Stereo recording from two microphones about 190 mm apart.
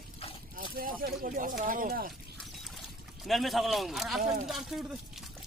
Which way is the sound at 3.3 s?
Centre (ahead or behind).